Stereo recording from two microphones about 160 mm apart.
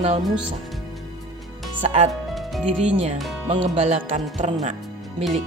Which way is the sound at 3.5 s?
40° right (ahead or behind).